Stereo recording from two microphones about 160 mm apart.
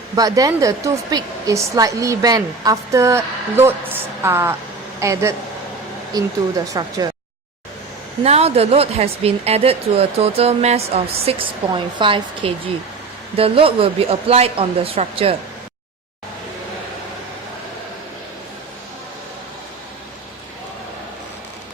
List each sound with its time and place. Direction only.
0.2 s a woman's voice: 20° right (ahead or behind)
8.2 s speech: 40° right (ahead or behind)